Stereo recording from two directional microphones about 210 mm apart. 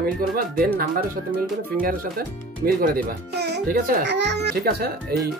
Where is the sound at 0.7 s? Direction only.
40° right (ahead or behind).